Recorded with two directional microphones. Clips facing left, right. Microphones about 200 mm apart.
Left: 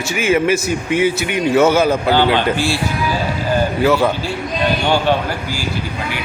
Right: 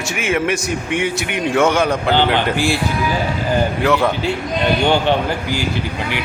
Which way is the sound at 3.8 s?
Centre (ahead or behind).